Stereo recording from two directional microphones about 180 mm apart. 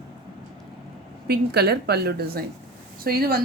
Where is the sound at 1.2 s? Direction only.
60° right (ahead or behind).